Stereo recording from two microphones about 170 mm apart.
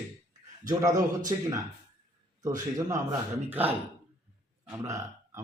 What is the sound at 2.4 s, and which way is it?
Speech, 20° right (ahead or behind).